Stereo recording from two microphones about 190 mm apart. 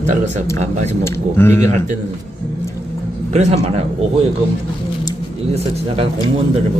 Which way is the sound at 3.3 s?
35° right (ahead or behind).